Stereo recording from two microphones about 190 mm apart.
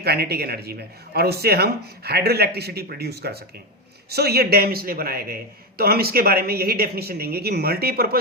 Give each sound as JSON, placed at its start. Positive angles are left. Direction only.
{"t": 0.0, "sound": "a man's voice", "side_deg": -55}